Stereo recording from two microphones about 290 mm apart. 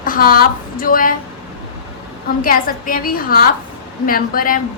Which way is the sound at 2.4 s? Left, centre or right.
Left.